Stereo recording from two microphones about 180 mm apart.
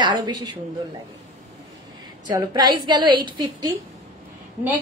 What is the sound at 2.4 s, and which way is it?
A woman's voice, 25° right (ahead or behind).